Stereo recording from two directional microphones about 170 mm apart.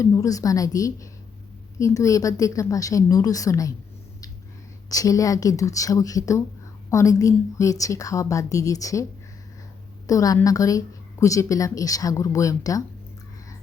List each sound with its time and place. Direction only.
0.0 s a woman's voice: 20° left (ahead or behind)
4.9 s a woman's voice: 20° left (ahead or behind)
10.1 s a woman's voice: 20° left (ahead or behind)